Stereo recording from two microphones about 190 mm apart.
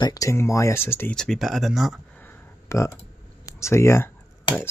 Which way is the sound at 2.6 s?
15° left (ahead or behind).